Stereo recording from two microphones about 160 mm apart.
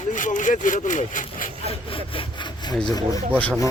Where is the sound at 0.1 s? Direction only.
55° left (ahead or behind).